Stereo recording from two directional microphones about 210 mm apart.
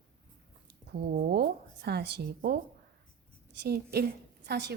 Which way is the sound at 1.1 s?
50° right (ahead or behind).